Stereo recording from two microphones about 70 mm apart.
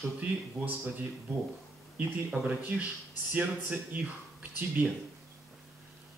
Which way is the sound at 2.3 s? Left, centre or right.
Centre.